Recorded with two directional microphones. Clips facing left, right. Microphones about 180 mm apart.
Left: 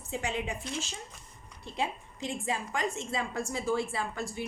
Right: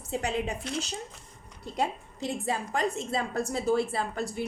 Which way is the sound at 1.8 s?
40° right (ahead or behind).